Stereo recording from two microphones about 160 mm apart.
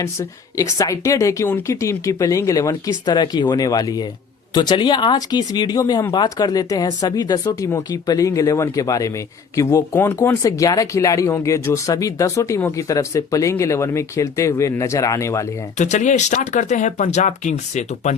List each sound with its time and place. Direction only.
0.0 s speech: 20° left (ahead or behind)
15.8 s speech: 50° left (ahead or behind)